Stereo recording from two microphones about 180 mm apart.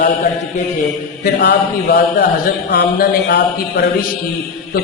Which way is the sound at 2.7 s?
70° left (ahead or behind).